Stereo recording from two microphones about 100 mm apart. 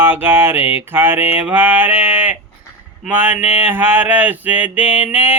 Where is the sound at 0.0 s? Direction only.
20° right (ahead or behind).